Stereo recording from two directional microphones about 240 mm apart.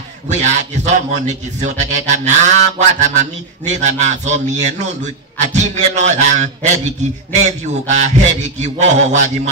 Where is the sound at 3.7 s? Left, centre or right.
Right.